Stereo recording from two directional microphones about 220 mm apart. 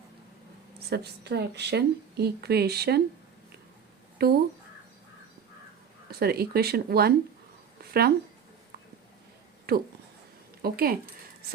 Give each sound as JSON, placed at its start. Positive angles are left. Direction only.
{"t": 0.8, "sound": "speech", "side_deg": -45}
{"t": 4.2, "sound": "speech", "side_deg": -45}
{"t": 6.1, "sound": "speech", "side_deg": -45}
{"t": 7.8, "sound": "a sound", "side_deg": -45}
{"t": 9.7, "sound": "speech", "side_deg": -45}